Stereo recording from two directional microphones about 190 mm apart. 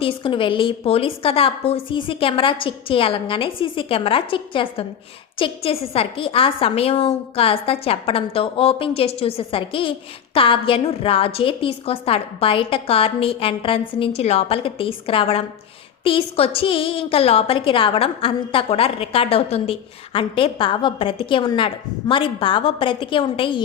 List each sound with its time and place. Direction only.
0.0 s a woman's voice: 25° left (ahead or behind)